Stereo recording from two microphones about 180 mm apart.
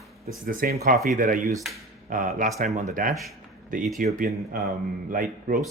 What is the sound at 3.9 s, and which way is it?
A man's voice, 50° right (ahead or behind).